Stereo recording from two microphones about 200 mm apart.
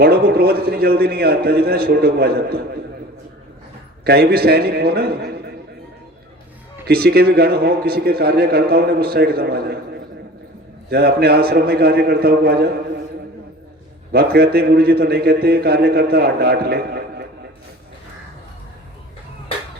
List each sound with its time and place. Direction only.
0.0 s a man's voice: 50° right (ahead or behind)
4.0 s a man's voice: 50° right (ahead or behind)
6.8 s a man's voice: 50° right (ahead or behind)
10.8 s a man's voice: 50° right (ahead or behind)
14.1 s a man's voice: 50° right (ahead or behind)